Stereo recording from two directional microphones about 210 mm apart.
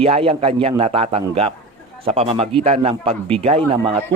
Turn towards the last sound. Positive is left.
turn(degrees=-30)  # may be behind; listen again after turning